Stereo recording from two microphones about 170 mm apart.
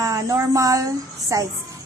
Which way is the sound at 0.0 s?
20° right (ahead or behind).